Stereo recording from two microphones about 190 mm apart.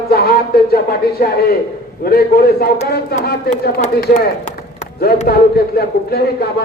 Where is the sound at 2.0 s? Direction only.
55° left (ahead or behind).